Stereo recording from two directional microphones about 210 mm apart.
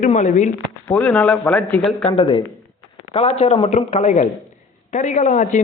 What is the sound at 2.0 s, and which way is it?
A man's voice, 25° left (ahead or behind).